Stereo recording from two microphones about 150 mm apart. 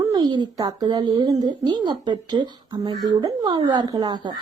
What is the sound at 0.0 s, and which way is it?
A woman's voice, 25° right (ahead or behind).